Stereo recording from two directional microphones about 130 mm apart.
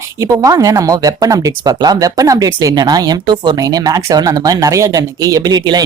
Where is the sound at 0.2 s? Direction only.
25° right (ahead or behind).